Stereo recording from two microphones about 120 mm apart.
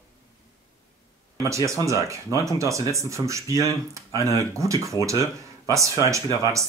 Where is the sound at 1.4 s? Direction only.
25° right (ahead or behind).